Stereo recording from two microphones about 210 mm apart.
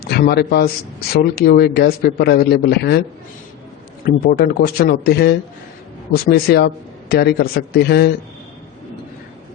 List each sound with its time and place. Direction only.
0.0 s a man's voice: 50° left (ahead or behind)
4.0 s a man's voice: 45° left (ahead or behind)